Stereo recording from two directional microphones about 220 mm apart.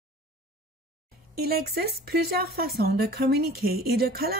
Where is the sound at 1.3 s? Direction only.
45° right (ahead or behind).